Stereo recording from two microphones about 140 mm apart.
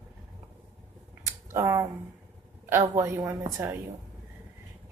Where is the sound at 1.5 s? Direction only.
20° right (ahead or behind).